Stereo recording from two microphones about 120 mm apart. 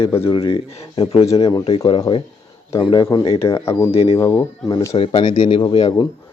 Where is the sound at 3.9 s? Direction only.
55° left (ahead or behind).